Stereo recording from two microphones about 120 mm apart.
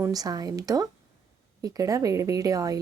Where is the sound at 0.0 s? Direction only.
30° right (ahead or behind).